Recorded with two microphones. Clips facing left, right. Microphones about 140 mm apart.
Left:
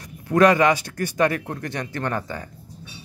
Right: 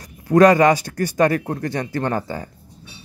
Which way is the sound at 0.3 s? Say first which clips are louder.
Right 4 dB; 40° right (ahead or behind).